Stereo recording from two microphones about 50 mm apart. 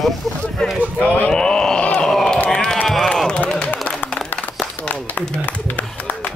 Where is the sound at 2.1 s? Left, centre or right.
Centre.